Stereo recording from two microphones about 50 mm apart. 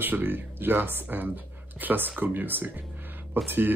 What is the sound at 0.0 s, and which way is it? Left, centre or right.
Speech, right.